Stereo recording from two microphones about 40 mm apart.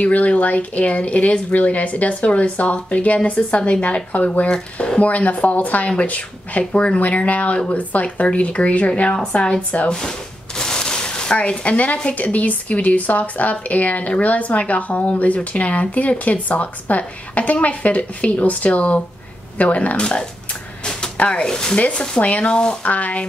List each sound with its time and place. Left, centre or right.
0.0 s speech: left
7.0 s speech: left
9.3 s speech: left
9.8 s a sound: centre; by 12.0 s left
12.2 s speech: left
20.0 s speech: left
21.7 s speech: left
22.5 s speech: left
22.8 s speech: left